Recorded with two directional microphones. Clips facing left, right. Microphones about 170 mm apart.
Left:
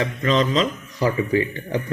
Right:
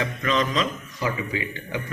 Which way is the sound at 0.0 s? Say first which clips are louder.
Left 4 dB; 35° left (ahead or behind).